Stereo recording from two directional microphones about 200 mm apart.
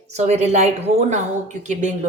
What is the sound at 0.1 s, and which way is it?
Music, 35° right (ahead or behind).